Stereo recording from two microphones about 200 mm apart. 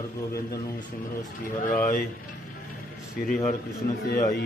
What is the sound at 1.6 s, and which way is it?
Speech, 40° left (ahead or behind).